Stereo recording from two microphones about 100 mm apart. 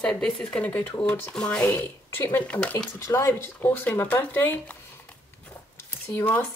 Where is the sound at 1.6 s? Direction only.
25° left (ahead or behind).